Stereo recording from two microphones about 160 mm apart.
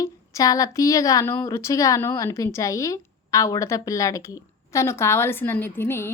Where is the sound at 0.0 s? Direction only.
20° left (ahead or behind).